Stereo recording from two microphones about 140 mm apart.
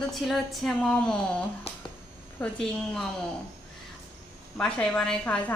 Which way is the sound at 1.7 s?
45° left (ahead or behind).